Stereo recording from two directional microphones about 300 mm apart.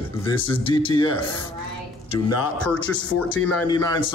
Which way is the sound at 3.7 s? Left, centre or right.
Centre.